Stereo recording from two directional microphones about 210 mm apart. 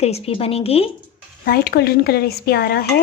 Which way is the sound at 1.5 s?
50° left (ahead or behind).